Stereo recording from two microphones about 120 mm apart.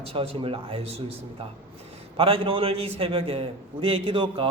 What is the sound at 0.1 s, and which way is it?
Speech, 50° right (ahead or behind).